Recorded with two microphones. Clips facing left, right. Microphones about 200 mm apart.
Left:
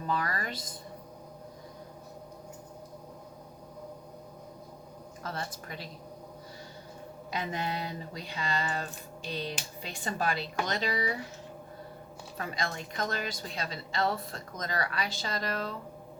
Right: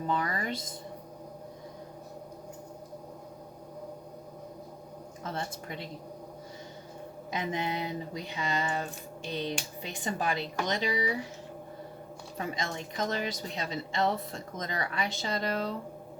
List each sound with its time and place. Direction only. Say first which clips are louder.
0.1 s speech: right 1 dB; 20° right (ahead or behind)
5.2 s a woman's voice: right 2 dB; 25° right (ahead or behind)
7.3 s a woman's voice: right 2 dB; 20° right (ahead or behind)
12.4 s a woman's voice: right 1 dB; 20° right (ahead or behind)